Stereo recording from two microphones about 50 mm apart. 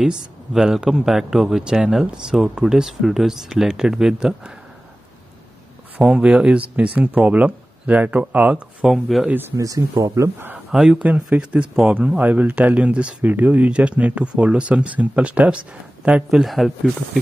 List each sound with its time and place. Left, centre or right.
0.0 s a man's voice: centre
5.9 s speech: centre
8.8 s speech: centre
9.6 s speech: right
10.7 s speech: centre
11.1 s speech: right
12.2 s speech: right
12.7 s speech: right
16.3 s speech: centre